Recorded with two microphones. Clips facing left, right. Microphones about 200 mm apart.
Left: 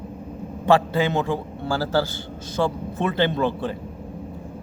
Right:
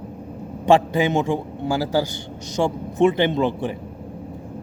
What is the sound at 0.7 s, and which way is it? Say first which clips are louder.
Speech: right 2 dB; 15° right (ahead or behind).